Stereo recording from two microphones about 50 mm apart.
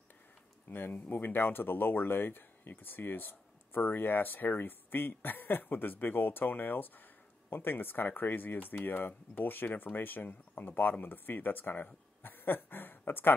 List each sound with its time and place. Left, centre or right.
0.7 s speech: left